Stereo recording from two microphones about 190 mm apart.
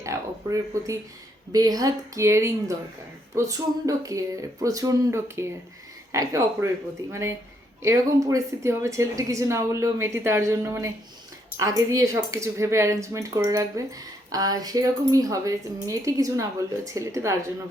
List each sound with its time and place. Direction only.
0.0 s a woman's voice: 15° right (ahead or behind)